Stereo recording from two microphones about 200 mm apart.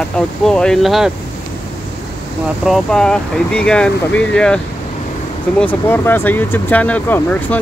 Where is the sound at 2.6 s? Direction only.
Centre (ahead or behind).